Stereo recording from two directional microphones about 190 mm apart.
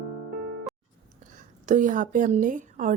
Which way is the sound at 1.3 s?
40° right (ahead or behind).